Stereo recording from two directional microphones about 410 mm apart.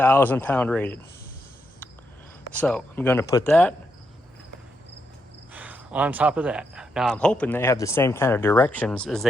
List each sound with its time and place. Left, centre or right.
0.0 s speech: centre
2.5 s speech: centre
5.5 s speech: centre